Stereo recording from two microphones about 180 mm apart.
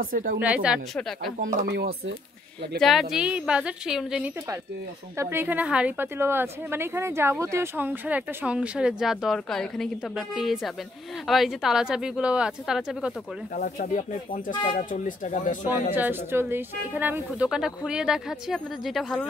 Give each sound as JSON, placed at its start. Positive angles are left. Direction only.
{"t": 0.0, "sound": "a woman's voice", "side_deg": -50}
{"t": 0.4, "sound": "a woman's voice", "side_deg": -5}
{"t": 1.7, "sound": "speech", "side_deg": -65}
{"t": 2.8, "sound": "speech", "side_deg": 0}
{"t": 5.1, "sound": "a woman's voice", "side_deg": -15}
{"t": 13.6, "sound": "speech", "side_deg": 45}
{"t": 14.5, "sound": "speech", "side_deg": 25}
{"t": 14.8, "sound": "speech", "side_deg": 45}
{"t": 15.9, "sound": "speech", "side_deg": -10}